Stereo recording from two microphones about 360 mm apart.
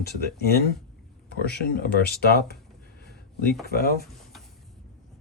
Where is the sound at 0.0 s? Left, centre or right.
Left.